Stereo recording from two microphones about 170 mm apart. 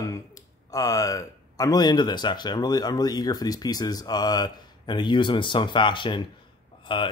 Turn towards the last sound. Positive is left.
turn(degrees=30)  # may be behind; listen again after turning